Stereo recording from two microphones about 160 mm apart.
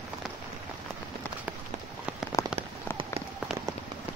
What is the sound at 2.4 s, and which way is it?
Rain on surface, 20° left (ahead or behind).